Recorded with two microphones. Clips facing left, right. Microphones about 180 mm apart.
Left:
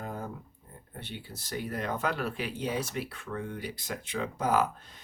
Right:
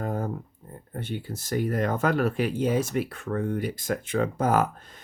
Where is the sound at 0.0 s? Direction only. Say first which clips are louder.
Right 8 dB; 45° right (ahead or behind).